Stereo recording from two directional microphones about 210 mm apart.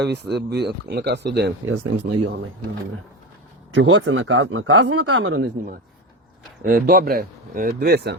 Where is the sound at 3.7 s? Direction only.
60° right (ahead or behind).